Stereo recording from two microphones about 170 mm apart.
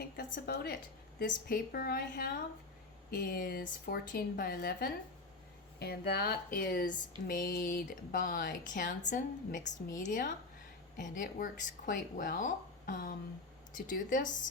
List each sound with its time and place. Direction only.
0.0 s a woman's voice: 55° left (ahead or behind)
1.2 s a woman's voice: 60° left (ahead or behind)